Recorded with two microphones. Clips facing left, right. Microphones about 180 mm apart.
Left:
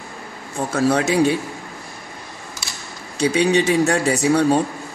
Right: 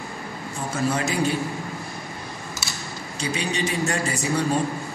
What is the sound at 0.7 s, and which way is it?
Speech, 75° left (ahead or behind).